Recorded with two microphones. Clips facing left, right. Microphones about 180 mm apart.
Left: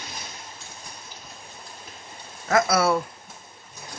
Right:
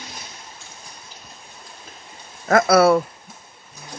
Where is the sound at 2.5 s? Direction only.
60° right (ahead or behind).